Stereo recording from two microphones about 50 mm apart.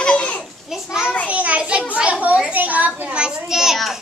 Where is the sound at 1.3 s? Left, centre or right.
Right.